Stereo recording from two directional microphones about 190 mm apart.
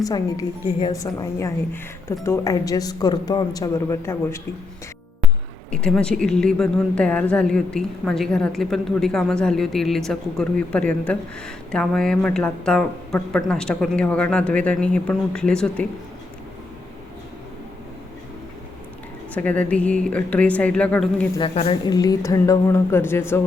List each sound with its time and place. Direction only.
0.0 s a woman's voice: 20° left (ahead or behind)
5.7 s a woman's voice: 5° left (ahead or behind)
19.3 s speech: 10° left (ahead or behind)
21.4 s speech: 30° left (ahead or behind); by 23.4 s 10° left (ahead or behind)